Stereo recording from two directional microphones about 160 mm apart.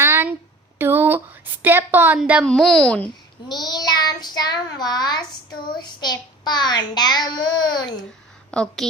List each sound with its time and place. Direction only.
0.0 s a sound: 15° right (ahead or behind)
1.6 s a woman's voice: 10° right (ahead or behind)
2.4 s a woman's voice: 5° left (ahead or behind)
3.5 s a child's voice: 25° left (ahead or behind)
8.4 s a woman's voice: 5° left (ahead or behind)